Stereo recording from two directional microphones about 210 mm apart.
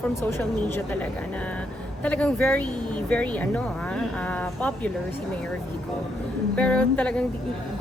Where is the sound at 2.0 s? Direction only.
5° left (ahead or behind).